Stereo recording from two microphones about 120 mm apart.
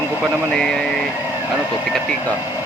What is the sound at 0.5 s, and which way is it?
Speech, 5° left (ahead or behind).